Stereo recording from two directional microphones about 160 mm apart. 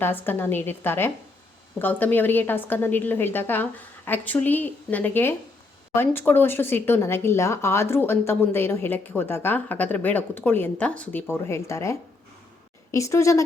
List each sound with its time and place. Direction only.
0.0 s a woman's voice: 15° left (ahead or behind)